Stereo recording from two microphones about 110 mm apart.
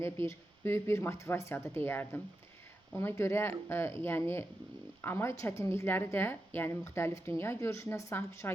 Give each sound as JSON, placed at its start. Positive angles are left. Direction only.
{"t": 0.0, "sound": "a woman's voice", "side_deg": 25}